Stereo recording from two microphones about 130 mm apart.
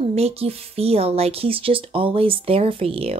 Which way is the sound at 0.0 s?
50° right (ahead or behind).